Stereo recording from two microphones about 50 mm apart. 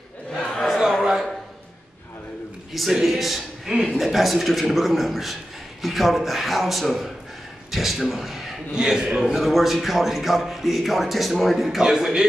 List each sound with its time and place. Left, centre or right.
0.3 s a sound: centre
0.7 s a sound: centre
2.7 s a man's voice: centre
3.7 s a man's voice: centre
4.0 s a man's voice: centre
11.8 s a man's voice: centre